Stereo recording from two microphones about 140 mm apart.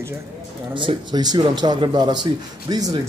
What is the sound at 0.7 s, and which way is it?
Speech, 35° right (ahead or behind).